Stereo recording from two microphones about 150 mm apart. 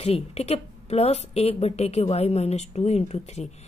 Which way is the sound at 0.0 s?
45° left (ahead or behind).